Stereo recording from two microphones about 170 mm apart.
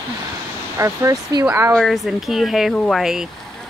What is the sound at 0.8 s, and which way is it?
Speech, 20° right (ahead or behind).